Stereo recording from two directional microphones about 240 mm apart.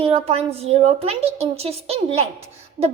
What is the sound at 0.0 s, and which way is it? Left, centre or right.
A woman's voice, right.